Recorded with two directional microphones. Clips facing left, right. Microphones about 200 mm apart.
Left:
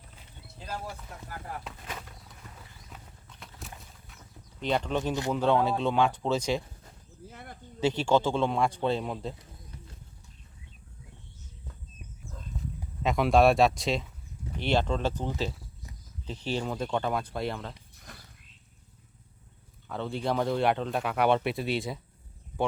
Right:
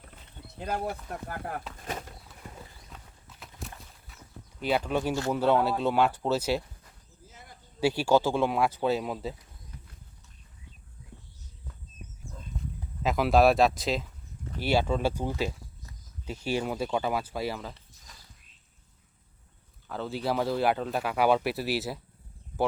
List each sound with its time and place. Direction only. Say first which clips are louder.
0.6 s speech: right 7 dB; 60° right (ahead or behind)
1.9 s bird: right 6 dB; 40° right (ahead or behind)
2.9 s horse: left 1 dB; 5° right (ahead or behind)
4.6 s speech: right 1 dB; 5° right (ahead or behind)
7.3 s a sound: left 7 dB; 60° left (ahead or behind)
7.8 s speech: right 1 dB; 10° right (ahead or behind)
12.3 s horse: left 1 dB; centre (ahead or behind)
14.6 s speech: right 1 dB; 10° right (ahead or behind)
17.9 s a sound: left 6 dB; 60° left (ahead or behind)
19.9 s speech: even; centre (ahead or behind)